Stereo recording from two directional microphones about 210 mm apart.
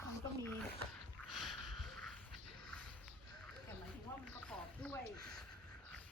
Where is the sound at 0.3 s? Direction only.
10° left (ahead or behind).